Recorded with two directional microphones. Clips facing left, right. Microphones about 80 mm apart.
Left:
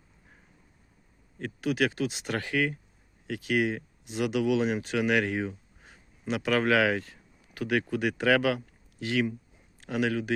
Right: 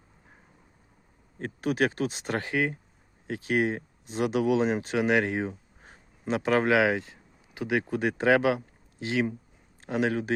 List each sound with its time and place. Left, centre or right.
1.4 s speech: right